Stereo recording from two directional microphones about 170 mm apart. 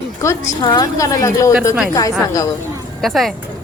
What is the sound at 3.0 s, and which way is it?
Speech, centre (ahead or behind).